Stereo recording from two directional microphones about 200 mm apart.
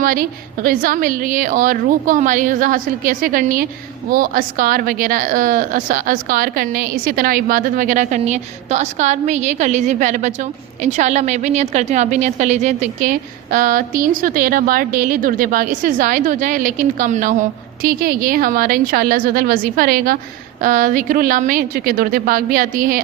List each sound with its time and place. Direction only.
0.0 s a woman's voice: 45° right (ahead or behind)